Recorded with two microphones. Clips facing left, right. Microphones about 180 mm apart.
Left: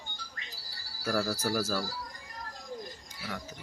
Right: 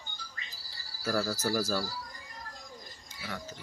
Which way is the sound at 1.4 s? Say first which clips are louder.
Even; 5° left (ahead or behind).